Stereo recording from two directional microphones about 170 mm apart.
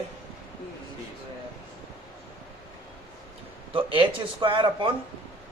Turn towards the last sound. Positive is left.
turn(degrees=-30)  # may be behind; listen again after turning